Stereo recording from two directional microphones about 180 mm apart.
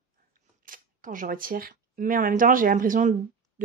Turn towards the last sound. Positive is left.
turn(degrees=-45)  # may be behind; listen again after turning